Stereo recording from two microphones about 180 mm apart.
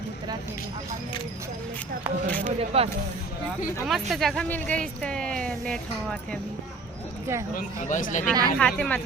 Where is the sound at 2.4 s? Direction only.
35° right (ahead or behind).